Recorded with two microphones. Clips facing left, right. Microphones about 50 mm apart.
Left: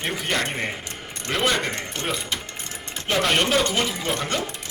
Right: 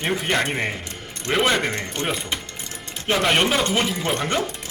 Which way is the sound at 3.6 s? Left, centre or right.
Right.